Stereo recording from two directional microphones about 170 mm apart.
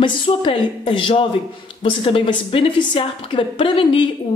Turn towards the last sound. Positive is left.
turn(degrees=30)  # may be behind; listen again after turning